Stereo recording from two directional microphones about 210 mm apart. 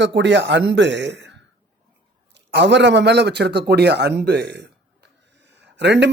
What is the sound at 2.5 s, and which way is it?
Speech, 55° right (ahead or behind).